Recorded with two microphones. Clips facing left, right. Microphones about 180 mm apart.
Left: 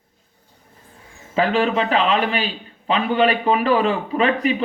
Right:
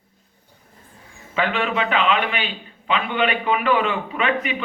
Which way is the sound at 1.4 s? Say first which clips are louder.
Left 4 dB; 35° left (ahead or behind).